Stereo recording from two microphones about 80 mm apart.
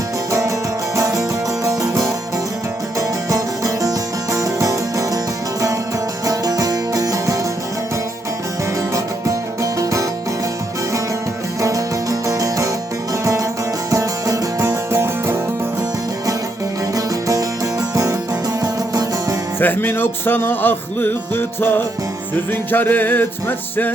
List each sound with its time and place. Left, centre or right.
0.3 s music: right
8.9 s music: right
11.6 s music: right
14.9 s music: right
16.9 s music: right
19.5 s music: left